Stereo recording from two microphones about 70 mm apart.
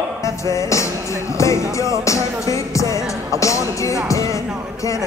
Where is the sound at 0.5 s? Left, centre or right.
Left.